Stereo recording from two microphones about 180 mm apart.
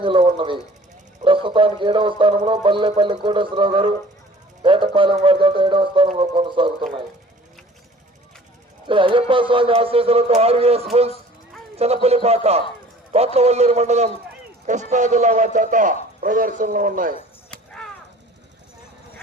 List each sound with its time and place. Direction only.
0.0 s speech: 30° right (ahead or behind)
8.9 s speech: 30° right (ahead or behind)
12.0 s a man's voice: 35° right (ahead or behind)
17.5 s a sound: 5° left (ahead or behind)